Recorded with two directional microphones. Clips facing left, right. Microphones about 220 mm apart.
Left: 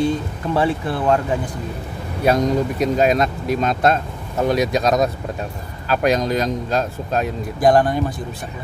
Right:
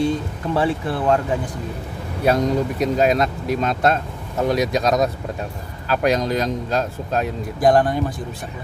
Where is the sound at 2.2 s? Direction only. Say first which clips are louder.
Left 1 dB; 15° left (ahead or behind).